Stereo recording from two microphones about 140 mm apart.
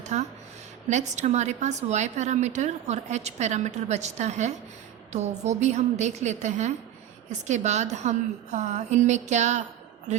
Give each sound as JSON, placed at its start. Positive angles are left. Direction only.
{"t": 0.0, "sound": "a woman's voice", "side_deg": -55}